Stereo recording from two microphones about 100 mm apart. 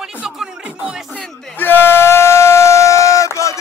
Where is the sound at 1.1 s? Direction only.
15° left (ahead or behind); by 3.5 s 30° left (ahead or behind).